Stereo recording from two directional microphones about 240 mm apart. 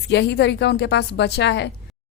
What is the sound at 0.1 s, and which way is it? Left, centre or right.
A woman's voice, left.